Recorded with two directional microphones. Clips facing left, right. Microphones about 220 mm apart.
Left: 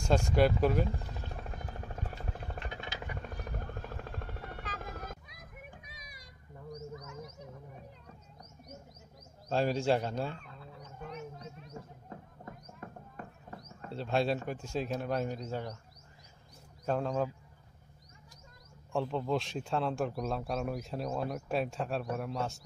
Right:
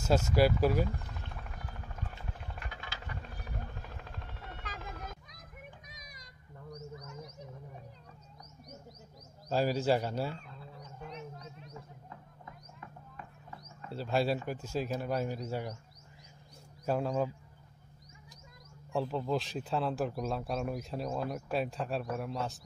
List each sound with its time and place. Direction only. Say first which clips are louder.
0.1 s a man's voice: even; 5° right (ahead or behind)
0.8 s helicopter: left 2 dB; 30° left (ahead or behind)
2.6 s a sound: left 5 dB; 20° left (ahead or behind)
3.2 s helicopter: left 3 dB; 45° left (ahead or behind)
5.9 s child singing: even; 10° left (ahead or behind)
9.5 s a man's voice: even; 5° right (ahead or behind)
12.1 s a sound: left 4 dB; 45° left (ahead or behind)
13.8 s a man's voice: even; 5° right (ahead or behind)
16.8 s speech: even; 10° right (ahead or behind)
18.9 s a man's voice: even; 5° right (ahead or behind)